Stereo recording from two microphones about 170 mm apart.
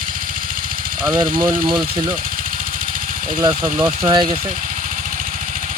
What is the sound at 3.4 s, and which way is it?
Speech, 30° right (ahead or behind).